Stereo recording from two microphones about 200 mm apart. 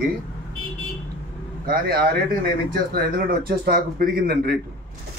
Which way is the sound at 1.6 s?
50° right (ahead or behind).